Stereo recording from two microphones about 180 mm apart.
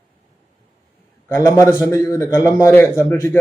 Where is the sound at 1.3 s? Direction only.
15° left (ahead or behind).